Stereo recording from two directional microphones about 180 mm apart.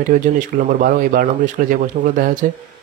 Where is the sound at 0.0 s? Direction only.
45° right (ahead or behind).